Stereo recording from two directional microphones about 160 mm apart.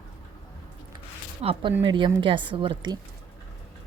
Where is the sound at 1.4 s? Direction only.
35° right (ahead or behind).